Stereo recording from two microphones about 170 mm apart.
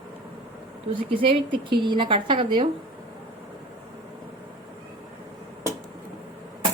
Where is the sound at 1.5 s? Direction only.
30° right (ahead or behind).